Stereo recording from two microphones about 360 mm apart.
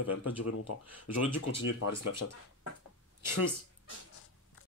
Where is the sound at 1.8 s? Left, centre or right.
Left.